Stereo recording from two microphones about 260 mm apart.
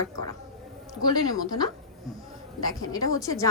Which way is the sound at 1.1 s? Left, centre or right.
Centre.